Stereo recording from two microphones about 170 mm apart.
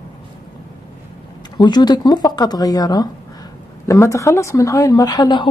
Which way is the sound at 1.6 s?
25° left (ahead or behind).